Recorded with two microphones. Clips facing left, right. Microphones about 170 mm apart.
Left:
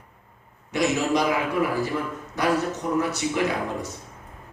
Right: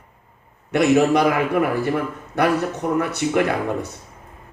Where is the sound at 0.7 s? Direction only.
60° right (ahead or behind).